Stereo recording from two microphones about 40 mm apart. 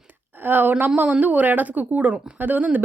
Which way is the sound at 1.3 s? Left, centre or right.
Right.